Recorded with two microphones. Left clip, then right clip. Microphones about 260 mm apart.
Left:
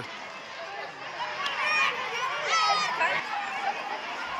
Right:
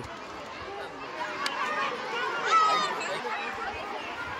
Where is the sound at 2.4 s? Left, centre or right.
Right.